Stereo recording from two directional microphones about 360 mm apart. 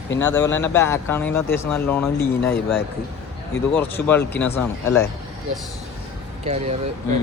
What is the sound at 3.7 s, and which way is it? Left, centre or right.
Speech, centre.